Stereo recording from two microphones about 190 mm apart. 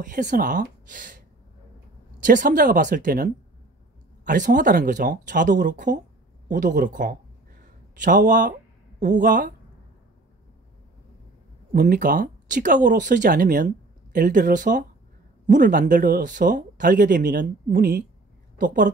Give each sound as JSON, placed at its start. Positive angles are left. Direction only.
{"t": 0.0, "sound": "speech", "side_deg": -45}
{"t": 11.7, "sound": "speech", "side_deg": -50}